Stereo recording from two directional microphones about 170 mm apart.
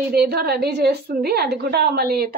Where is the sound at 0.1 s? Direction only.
70° right (ahead or behind).